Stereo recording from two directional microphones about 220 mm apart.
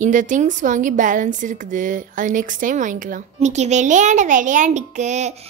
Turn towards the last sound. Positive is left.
turn(degrees=-30)  # may be behind; listen again after turning